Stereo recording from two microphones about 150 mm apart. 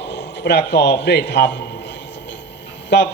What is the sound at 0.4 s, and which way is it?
Speech, 90° left.